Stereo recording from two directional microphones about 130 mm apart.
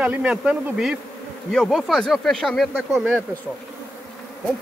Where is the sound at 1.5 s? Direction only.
5° left (ahead or behind).